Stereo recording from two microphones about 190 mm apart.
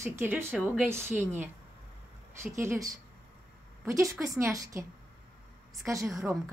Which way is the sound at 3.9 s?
15° right (ahead or behind).